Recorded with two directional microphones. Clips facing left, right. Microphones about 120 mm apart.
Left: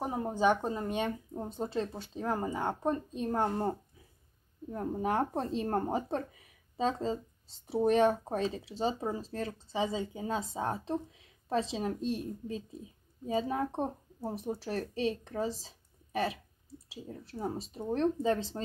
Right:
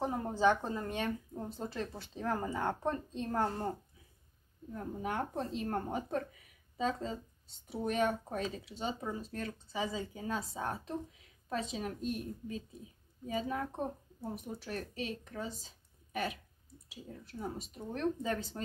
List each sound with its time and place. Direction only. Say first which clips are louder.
0.0 s speech: left 1 dB; 15° left (ahead or behind)
4.6 s a woman's voice: left 6 dB; 35° left (ahead or behind)